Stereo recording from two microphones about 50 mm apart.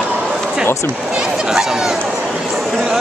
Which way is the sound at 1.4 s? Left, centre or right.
Centre.